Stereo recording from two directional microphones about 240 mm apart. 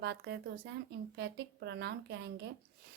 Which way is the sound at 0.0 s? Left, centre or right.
Right.